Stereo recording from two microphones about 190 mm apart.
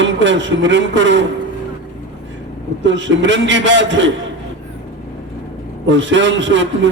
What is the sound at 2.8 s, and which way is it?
A man's voice, 75° right (ahead or behind).